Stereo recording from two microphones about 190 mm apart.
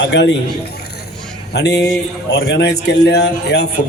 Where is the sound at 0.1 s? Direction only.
70° left (ahead or behind).